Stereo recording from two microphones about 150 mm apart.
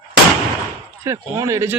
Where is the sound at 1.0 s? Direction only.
20° right (ahead or behind).